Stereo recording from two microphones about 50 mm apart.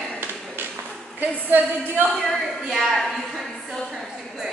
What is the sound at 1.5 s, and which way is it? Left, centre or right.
Speech, right.